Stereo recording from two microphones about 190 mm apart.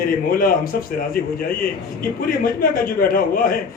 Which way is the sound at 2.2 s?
50° left (ahead or behind).